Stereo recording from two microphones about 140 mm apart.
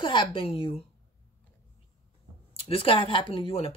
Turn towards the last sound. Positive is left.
turn(degrees=45)  # may be behind; listen again after turning